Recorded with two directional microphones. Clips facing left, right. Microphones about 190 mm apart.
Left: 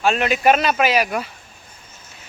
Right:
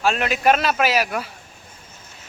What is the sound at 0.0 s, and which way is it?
Speech, centre (ahead or behind).